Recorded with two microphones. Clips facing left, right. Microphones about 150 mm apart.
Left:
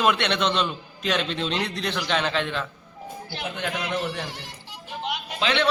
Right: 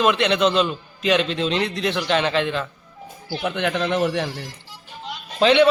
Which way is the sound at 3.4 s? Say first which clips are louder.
Right 7 dB; 75° right (ahead or behind).